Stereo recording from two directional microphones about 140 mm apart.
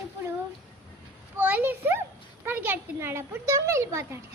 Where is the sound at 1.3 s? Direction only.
15° right (ahead or behind).